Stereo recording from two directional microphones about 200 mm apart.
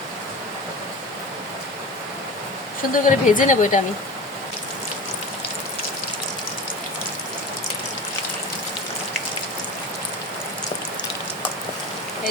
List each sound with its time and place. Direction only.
2.9 s speech: 40° left (ahead or behind)